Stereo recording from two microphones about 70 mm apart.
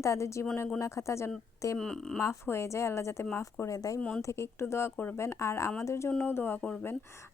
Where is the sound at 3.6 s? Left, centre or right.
Left.